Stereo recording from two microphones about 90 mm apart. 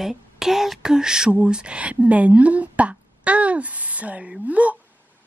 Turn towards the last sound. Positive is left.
turn(degrees=-15)  # may be behind; listen again after turning